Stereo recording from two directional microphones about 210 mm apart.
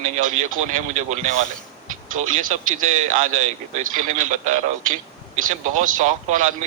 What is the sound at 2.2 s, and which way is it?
Speech, 40° right (ahead or behind).